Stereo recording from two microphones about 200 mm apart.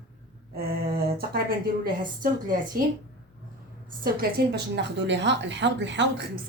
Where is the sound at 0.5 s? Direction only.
50° right (ahead or behind).